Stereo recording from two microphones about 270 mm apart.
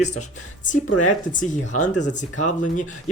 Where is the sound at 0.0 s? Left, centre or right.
Left.